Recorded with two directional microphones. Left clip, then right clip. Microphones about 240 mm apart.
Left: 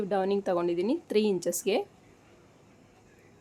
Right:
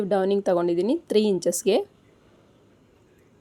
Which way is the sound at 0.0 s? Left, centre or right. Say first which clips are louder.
Right 6 dB; right.